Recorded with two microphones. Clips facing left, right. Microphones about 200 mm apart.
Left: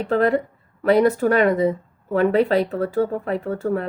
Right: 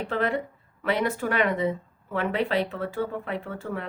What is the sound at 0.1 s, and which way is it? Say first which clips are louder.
Speech: left 10 dB; 40° left (ahead or behind).